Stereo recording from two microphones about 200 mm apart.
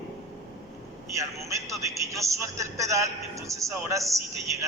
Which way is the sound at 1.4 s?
15° right (ahead or behind).